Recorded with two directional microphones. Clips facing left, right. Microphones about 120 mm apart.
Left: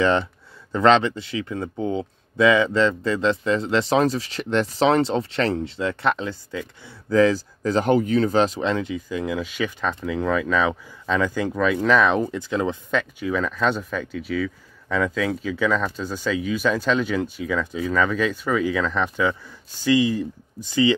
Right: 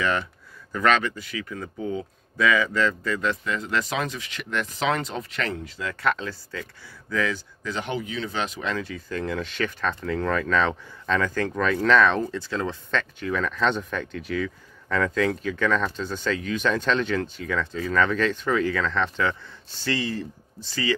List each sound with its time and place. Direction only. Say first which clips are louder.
0.0 s speech: left 6 dB; 30° left (ahead or behind)
7.1 s speech: left 9 dB; 35° left (ahead or behind); by 20.9 s 15° left (ahead or behind)